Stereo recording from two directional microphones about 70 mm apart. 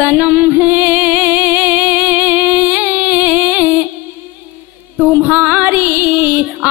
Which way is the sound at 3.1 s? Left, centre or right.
Right.